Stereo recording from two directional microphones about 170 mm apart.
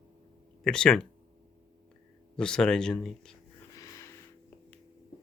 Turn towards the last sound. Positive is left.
turn(degrees=20)  # may be behind; listen again after turning